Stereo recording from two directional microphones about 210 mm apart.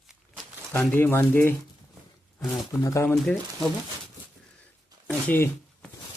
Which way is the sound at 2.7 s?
15° left (ahead or behind).